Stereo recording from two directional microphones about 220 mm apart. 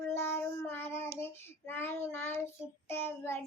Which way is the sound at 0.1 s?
10° left (ahead or behind).